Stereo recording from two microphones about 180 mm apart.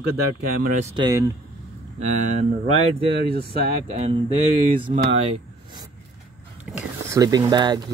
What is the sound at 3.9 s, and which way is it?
Speech, 35° right (ahead or behind).